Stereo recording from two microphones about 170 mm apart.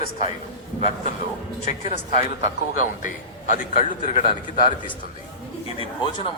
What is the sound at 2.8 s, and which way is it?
A man's voice, 50° left (ahead or behind).